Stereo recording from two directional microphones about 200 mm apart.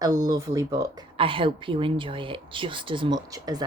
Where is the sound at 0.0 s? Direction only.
20° right (ahead or behind).